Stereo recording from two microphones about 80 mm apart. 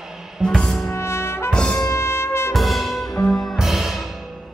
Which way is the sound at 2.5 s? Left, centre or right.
Centre.